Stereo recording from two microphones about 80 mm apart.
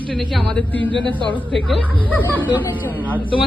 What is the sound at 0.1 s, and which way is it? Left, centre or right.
Speech, centre.